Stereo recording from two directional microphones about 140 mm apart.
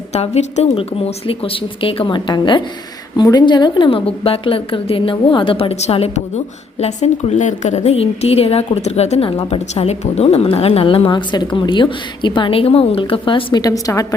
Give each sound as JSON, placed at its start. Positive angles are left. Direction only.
{"t": 0.1, "sound": "a woman's voice", "side_deg": 50}